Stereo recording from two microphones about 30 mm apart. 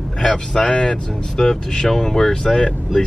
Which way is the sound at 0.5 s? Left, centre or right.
Left.